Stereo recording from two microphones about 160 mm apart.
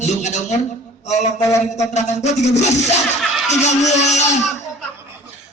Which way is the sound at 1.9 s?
45° left (ahead or behind).